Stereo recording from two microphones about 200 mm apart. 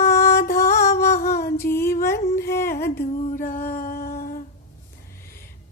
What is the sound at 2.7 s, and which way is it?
Humming, 50° left (ahead or behind).